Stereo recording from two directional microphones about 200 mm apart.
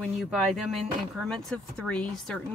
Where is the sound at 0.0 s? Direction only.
Centre (ahead or behind).